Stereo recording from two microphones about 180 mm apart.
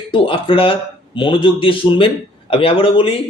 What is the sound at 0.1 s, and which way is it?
Speech, 30° left (ahead or behind).